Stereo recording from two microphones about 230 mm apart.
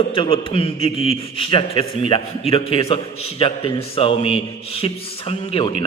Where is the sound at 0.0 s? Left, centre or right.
Left.